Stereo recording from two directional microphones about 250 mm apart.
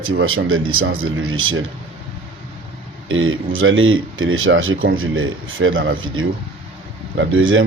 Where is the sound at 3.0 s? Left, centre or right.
Right.